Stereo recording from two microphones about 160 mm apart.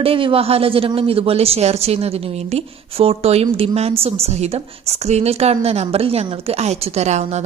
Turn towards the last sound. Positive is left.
turn(degrees=-45)  # may be behind; listen again after turning